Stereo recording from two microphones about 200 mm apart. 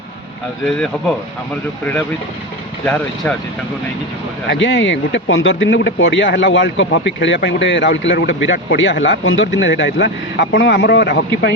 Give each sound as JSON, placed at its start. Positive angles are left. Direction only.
{"t": 2.8, "sound": "speech", "side_deg": 5}
{"t": 4.4, "sound": "a man's voice", "side_deg": 70}